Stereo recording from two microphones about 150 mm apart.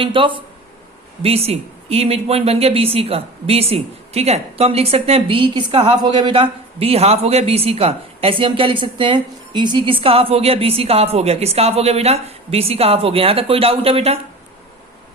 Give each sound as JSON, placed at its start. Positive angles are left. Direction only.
{"t": 0.0, "sound": "a man's voice", "side_deg": -35}